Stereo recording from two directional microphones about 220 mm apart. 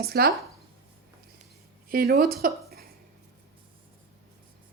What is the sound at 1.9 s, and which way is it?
Speech, 45° right (ahead or behind).